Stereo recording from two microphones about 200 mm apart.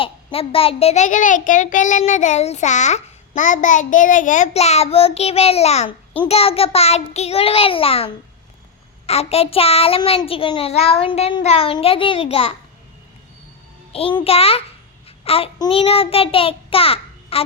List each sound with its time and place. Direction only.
0.0 s a child's voice: 30° left (ahead or behind)
6.2 s child singing: 30° left (ahead or behind)
13.9 s child singing: 25° left (ahead or behind)